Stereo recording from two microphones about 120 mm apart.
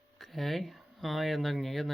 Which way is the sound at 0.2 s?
Centre (ahead or behind).